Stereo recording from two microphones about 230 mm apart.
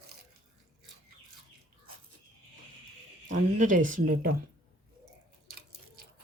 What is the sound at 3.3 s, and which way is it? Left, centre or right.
Speech, right.